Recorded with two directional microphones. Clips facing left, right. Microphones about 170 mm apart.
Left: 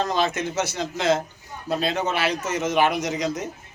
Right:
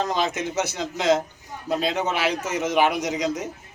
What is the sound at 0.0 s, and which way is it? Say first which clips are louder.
A man's voice: left 1 dB; 15° right (ahead or behind).